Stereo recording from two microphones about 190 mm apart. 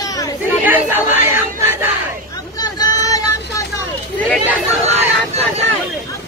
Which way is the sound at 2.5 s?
20° left (ahead or behind).